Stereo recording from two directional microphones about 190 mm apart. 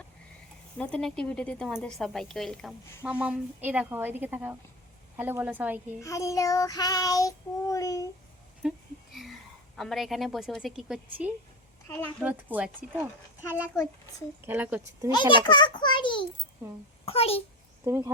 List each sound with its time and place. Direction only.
0.8 s a woman's voice: 5° left (ahead or behind)
6.0 s child singing: 15° left (ahead or behind)
8.6 s a sound: 5° right (ahead or behind)
9.7 s a woman's voice: centre (ahead or behind)
14.4 s a woman's voice: 10° right (ahead or behind)
15.1 s a child's voice: 25° left (ahead or behind)
17.8 s a woman's voice: 15° right (ahead or behind)